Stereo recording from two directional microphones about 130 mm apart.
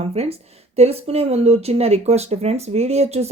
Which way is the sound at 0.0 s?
50° right (ahead or behind).